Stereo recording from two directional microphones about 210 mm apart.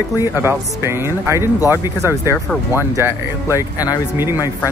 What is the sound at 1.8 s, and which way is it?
Speech, 10° right (ahead or behind).